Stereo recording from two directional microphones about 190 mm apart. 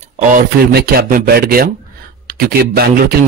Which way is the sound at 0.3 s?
50° right (ahead or behind).